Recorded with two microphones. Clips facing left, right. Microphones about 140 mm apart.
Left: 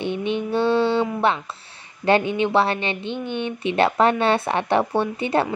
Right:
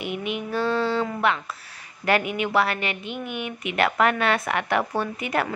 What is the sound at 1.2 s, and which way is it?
Speech, 30° left (ahead or behind).